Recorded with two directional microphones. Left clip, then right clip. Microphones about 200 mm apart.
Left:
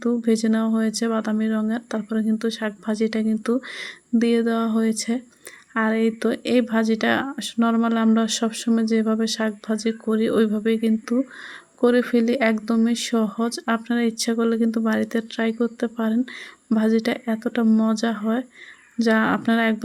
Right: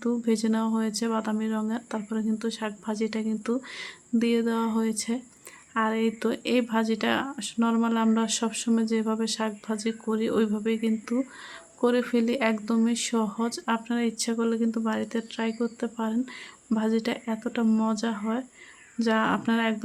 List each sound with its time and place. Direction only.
0.0 s speech: 15° left (ahead or behind)